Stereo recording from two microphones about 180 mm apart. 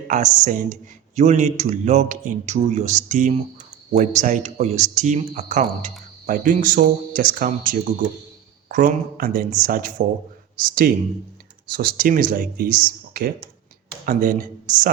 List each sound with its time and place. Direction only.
0.1 s speech: 45° right (ahead or behind)